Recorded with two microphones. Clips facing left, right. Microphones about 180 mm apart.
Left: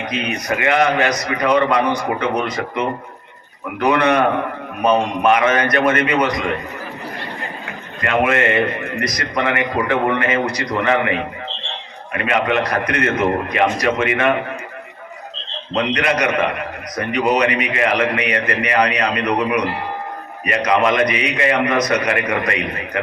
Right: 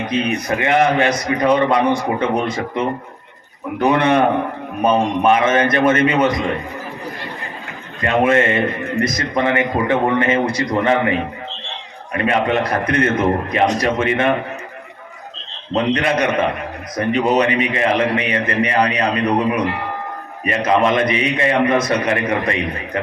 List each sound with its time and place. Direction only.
0.1 s a man's voice: 30° right (ahead or behind)
3.8 s a man's voice: 25° right (ahead or behind)
8.0 s a man's voice: 30° right (ahead or behind)
15.7 s a man's voice: 30° right (ahead or behind)